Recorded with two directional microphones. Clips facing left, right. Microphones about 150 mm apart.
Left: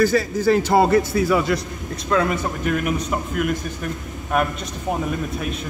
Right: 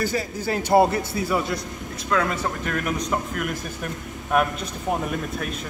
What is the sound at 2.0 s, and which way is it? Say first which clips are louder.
Speech: left 3 dB; 25° left (ahead or behind).